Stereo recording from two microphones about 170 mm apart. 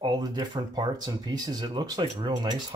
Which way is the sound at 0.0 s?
25° right (ahead or behind).